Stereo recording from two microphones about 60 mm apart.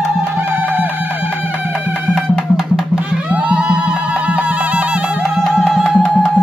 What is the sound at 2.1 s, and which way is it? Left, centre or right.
Music, centre.